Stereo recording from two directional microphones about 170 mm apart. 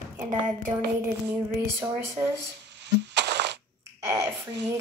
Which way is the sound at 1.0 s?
15° right (ahead or behind).